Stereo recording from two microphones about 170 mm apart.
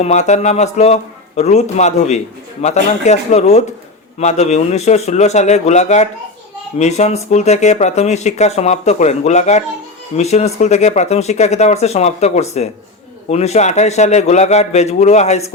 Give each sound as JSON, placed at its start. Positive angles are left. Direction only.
{"t": 0.0, "sound": "speech", "side_deg": 40}